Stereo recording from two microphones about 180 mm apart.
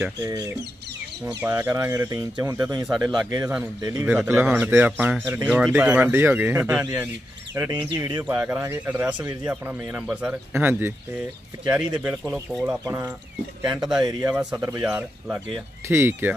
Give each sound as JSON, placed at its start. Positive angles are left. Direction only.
{"t": 0.2, "sound": "speech", "side_deg": -20}
{"t": 1.2, "sound": "speech", "side_deg": -10}
{"t": 7.7, "sound": "speech", "side_deg": -25}
{"t": 8.2, "sound": "speech", "side_deg": -10}
{"t": 13.7, "sound": "speech", "side_deg": -5}